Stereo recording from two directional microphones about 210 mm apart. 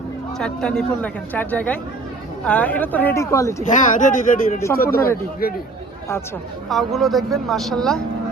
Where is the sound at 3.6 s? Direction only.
35° left (ahead or behind).